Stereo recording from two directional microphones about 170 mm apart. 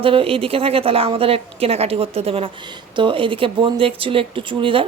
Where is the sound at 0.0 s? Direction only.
30° right (ahead or behind).